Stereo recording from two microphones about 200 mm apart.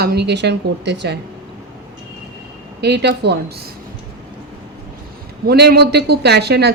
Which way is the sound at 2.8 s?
55° right (ahead or behind).